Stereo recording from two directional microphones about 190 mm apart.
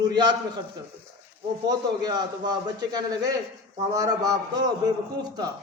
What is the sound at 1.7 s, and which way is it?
Speech, 20° right (ahead or behind).